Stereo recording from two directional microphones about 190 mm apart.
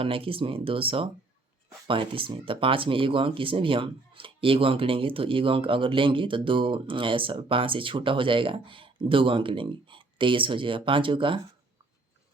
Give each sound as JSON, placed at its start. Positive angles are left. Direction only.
{"t": 0.0, "sound": "speech", "side_deg": -30}